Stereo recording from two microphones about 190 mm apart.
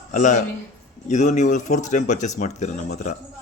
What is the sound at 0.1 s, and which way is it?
Speech, 40° left (ahead or behind).